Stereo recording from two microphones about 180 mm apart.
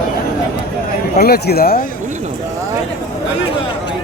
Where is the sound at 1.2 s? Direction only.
60° left (ahead or behind).